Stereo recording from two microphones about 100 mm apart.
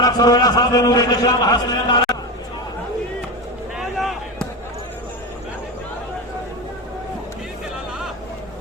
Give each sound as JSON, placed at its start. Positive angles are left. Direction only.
{"t": 0.0, "sound": "a man's voice", "side_deg": 40}
{"t": 3.8, "sound": "basketball bounce", "side_deg": 0}